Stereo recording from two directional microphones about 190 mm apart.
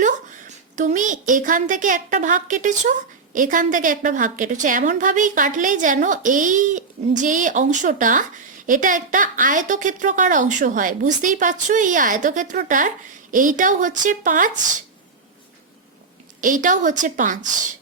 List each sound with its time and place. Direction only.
0.0 s a woman's voice: 40° right (ahead or behind)
16.4 s a woman's voice: 45° right (ahead or behind)